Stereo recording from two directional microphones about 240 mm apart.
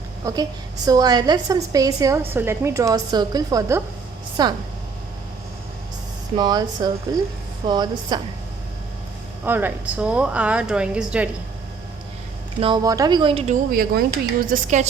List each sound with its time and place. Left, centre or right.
0.2 s a woman's voice: centre
6.3 s a woman's voice: centre
9.4 s a woman's voice: centre
12.5 s speech: centre
13.7 s speech: right